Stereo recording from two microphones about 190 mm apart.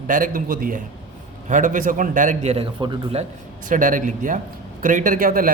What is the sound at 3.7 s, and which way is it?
Speech, 45° right (ahead or behind).